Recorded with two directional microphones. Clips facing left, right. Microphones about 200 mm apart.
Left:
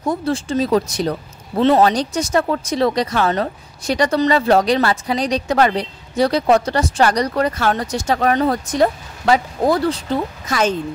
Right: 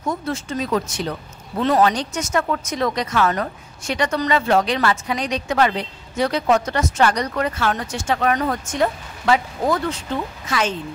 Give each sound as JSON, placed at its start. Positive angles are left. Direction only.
{"t": 0.0, "sound": "speech", "side_deg": 30}